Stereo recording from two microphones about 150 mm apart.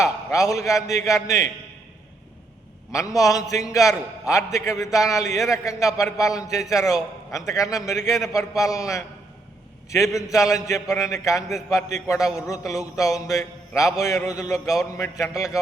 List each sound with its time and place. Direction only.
0.0 s a man's voice: 20° left (ahead or behind)
2.9 s a man's voice: 20° left (ahead or behind)